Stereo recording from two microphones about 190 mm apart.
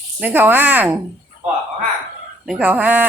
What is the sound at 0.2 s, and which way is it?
Speech, 10° right (ahead or behind).